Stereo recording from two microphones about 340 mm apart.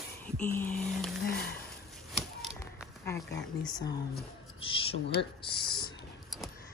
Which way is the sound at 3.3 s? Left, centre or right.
Centre.